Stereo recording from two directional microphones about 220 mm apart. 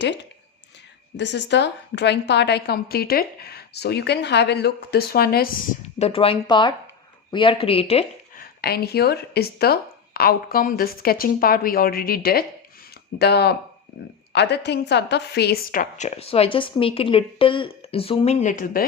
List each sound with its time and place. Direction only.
1.1 s a woman's voice: 55° left (ahead or behind)
6.0 s a woman's voice: 25° left (ahead or behind)
8.4 s a woman's voice: 45° left (ahead or behind)